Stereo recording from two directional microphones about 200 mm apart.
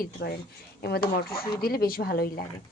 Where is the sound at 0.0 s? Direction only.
50° left (ahead or behind).